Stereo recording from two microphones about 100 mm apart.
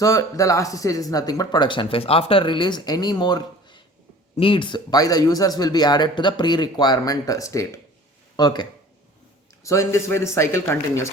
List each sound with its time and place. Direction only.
0.0 s speech: 35° left (ahead or behind)
4.4 s speech: 60° left (ahead or behind); by 7.8 s 30° left (ahead or behind)
8.4 s speech: 45° left (ahead or behind)
9.6 s a man's voice: 30° left (ahead or behind)